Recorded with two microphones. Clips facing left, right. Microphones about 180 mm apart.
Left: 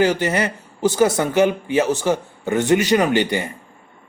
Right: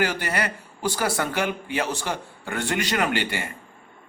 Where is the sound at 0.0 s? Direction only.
20° left (ahead or behind).